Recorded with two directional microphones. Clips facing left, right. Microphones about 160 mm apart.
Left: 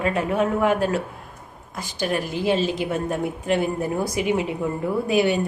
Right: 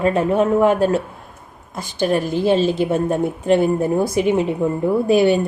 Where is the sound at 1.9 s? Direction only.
30° right (ahead or behind).